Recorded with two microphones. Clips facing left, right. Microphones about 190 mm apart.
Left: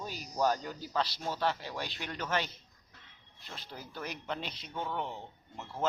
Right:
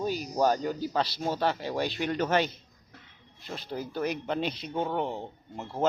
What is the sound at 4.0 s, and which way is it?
Speech, 65° right (ahead or behind).